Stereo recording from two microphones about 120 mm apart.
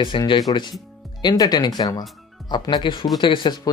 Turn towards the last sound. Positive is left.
turn(degrees=40)  # may be behind; listen again after turning